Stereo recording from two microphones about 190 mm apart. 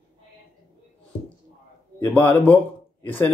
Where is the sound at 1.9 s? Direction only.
10° left (ahead or behind).